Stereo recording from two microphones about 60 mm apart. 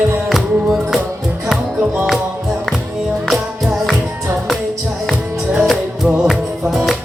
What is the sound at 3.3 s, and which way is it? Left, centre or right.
Music, centre.